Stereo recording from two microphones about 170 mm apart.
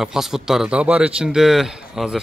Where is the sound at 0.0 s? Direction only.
5° right (ahead or behind).